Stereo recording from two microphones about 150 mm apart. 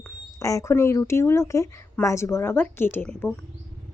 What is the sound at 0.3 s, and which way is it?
A woman's voice, 20° left (ahead or behind).